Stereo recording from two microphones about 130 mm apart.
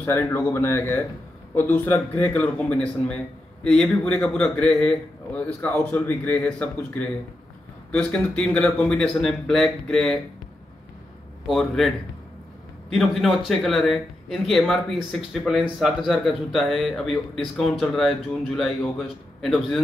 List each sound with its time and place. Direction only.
0.0 s a man's voice: 20° left (ahead or behind)
11.4 s speech: centre (ahead or behind)
12.9 s speech: centre (ahead or behind)